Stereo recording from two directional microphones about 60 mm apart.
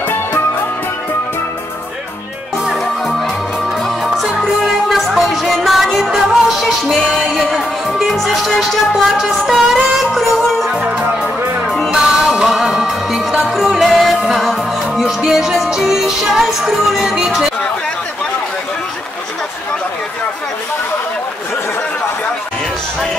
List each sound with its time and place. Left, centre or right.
2.7 s music: centre
4.4 s music: centre
10.8 s music: right
11.2 s music: centre